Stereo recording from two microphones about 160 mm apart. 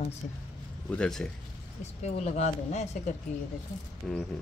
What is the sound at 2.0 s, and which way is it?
Speech, 45° left (ahead or behind).